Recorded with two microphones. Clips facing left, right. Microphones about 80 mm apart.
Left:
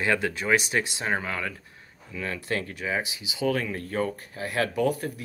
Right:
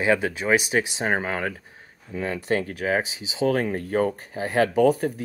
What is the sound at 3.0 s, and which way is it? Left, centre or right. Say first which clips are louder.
Speech: right 5 dB; right.